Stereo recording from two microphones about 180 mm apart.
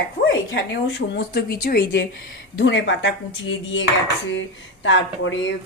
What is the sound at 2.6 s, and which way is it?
Speech, 90° left.